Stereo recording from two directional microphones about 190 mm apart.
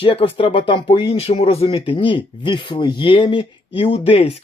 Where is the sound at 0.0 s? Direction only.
30° left (ahead or behind).